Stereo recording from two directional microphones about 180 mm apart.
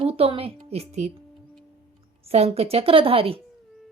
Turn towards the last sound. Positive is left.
turn(degrees=-30)  # may be behind; listen again after turning